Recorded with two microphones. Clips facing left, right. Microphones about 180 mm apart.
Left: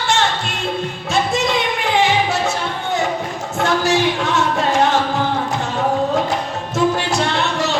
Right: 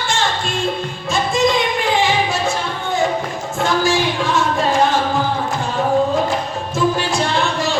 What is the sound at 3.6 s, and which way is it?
Music, 65° left (ahead or behind).